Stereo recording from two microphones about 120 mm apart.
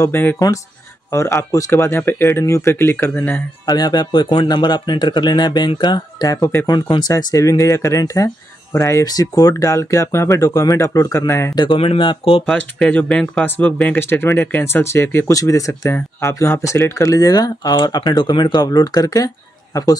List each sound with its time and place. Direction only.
0.0 s speech: 20° left (ahead or behind)
3.6 s speech: 35° left (ahead or behind)
11.5 s speech: 40° left (ahead or behind)
12.4 s speech: 5° left (ahead or behind); by 20.0 s 30° left (ahead or behind)